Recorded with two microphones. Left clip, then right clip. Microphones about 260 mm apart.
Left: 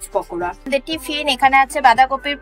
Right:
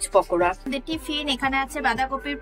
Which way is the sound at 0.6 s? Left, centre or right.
Centre.